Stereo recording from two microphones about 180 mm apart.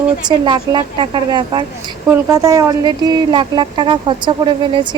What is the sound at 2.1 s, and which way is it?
Speech, 15° right (ahead or behind).